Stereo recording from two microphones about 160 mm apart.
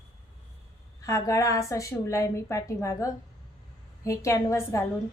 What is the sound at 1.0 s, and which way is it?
A woman's voice, 20° left (ahead or behind).